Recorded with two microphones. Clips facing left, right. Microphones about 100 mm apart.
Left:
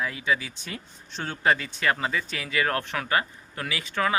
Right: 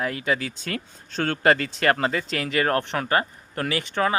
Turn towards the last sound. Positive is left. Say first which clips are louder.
# right 3 dB
turn(degrees=-35)  # may be behind; listen again after turning